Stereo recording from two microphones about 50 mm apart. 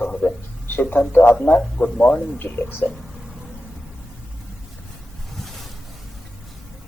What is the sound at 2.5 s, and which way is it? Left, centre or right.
Speech, left.